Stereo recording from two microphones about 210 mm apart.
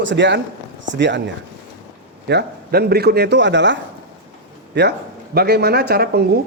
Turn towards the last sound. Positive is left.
turn(degrees=-50)  # may be behind; listen again after turning